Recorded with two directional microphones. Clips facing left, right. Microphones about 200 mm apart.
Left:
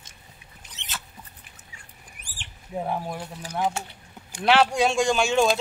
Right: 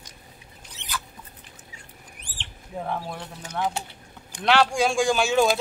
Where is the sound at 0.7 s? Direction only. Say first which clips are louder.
Right 5 dB; 25° left (ahead or behind).